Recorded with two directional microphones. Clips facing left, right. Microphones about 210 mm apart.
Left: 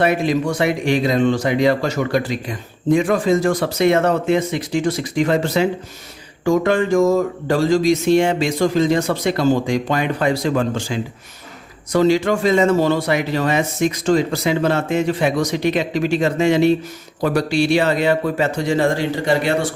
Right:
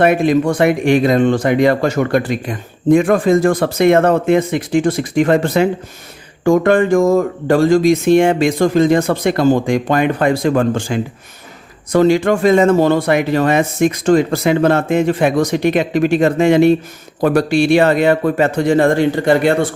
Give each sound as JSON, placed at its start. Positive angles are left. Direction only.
{"t": 0.0, "sound": "speech", "side_deg": -55}